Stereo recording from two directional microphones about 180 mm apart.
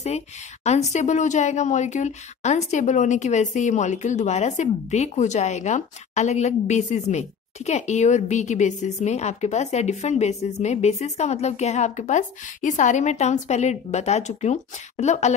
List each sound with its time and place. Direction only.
0.7 s speech: 40° left (ahead or behind)